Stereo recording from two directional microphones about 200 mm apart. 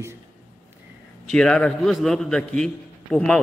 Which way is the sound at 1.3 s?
5° left (ahead or behind).